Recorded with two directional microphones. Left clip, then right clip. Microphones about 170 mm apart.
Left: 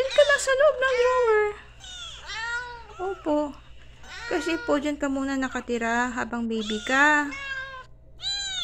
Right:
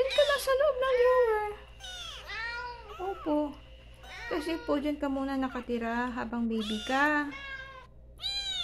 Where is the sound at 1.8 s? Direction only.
25° right (ahead or behind).